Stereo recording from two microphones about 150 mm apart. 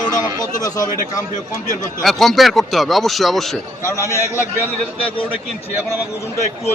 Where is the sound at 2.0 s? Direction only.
Centre (ahead or behind).